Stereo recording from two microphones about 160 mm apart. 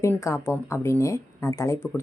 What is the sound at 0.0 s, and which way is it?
Speech, 20° left (ahead or behind).